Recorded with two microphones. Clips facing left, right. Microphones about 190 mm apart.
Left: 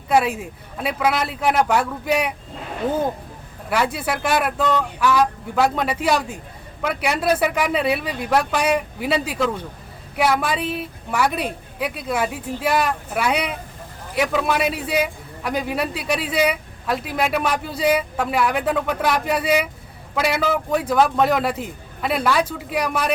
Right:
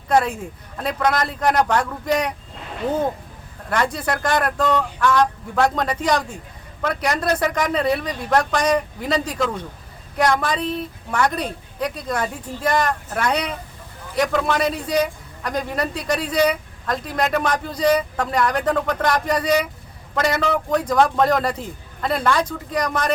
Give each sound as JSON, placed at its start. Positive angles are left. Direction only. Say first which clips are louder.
{"t": 0.1, "sound": "a man's voice", "louder": "even", "side_deg": 5}
{"t": 3.7, "sound": "a man's voice", "louder": "even", "side_deg": 5}